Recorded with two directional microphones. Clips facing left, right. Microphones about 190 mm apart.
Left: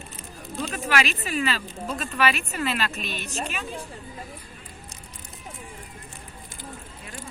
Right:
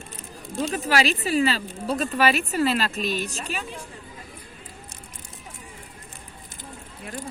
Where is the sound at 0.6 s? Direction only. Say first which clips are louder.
Right 3 dB; 35° right (ahead or behind).